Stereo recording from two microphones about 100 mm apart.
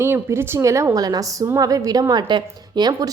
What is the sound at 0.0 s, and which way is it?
A woman's voice, 25° right (ahead or behind).